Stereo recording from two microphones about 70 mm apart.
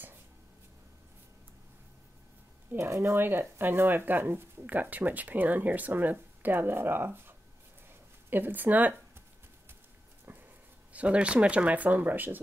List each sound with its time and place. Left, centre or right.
2.8 s speech: right
3.2 s speech: right
10.3 s a sound: right
10.9 s speech: centre